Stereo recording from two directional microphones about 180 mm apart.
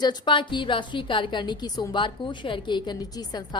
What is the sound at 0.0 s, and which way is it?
A woman's voice, 25° left (ahead or behind).